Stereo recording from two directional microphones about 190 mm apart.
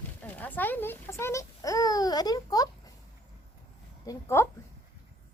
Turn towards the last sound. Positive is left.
turn(degrees=15)  # may be behind; listen again after turning